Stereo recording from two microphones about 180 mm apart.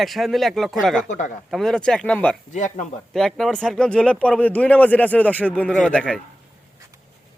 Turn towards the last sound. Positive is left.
turn(degrees=5)  # may be behind; listen again after turning